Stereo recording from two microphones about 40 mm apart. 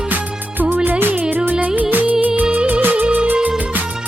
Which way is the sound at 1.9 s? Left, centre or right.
Right.